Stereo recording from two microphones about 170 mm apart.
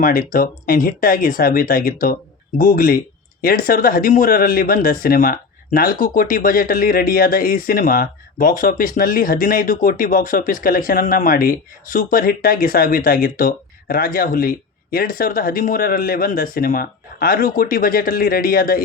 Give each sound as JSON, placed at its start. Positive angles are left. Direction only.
{"t": 0.0, "sound": "speech", "side_deg": 55}